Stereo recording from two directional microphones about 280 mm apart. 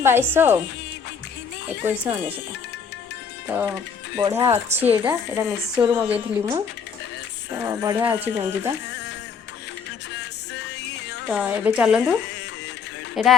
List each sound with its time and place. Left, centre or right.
0.0 s speech: centre
3.5 s speech: centre
7.6 s speech: centre
10.2 s music: left
11.3 s speech: centre
13.2 s speech: centre